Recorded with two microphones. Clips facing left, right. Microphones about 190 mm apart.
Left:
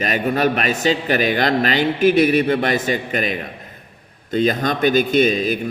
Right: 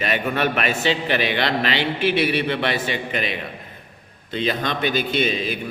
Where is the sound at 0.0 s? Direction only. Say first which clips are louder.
Left 4 dB; 40° left (ahead or behind).